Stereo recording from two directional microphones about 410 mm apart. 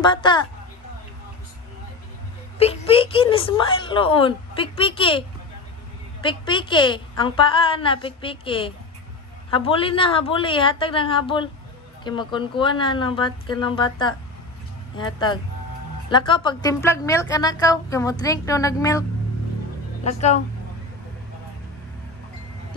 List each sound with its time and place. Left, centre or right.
0.0 s a woman's voice: centre
2.6 s a woman's voice: centre
6.2 s a woman's voice: centre